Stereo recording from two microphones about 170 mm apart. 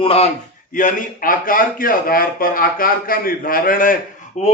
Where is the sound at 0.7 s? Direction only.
50° left (ahead or behind).